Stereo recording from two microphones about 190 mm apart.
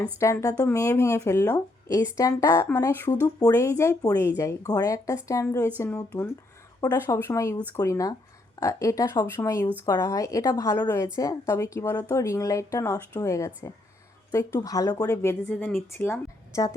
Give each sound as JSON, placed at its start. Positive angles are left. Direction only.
{"t": 0.2, "sound": "a woman's voice", "side_deg": 15}